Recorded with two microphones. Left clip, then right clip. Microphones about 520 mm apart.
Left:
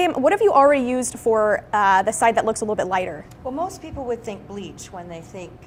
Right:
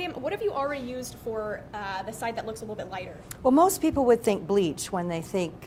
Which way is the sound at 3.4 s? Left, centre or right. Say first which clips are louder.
Right 7 dB; right.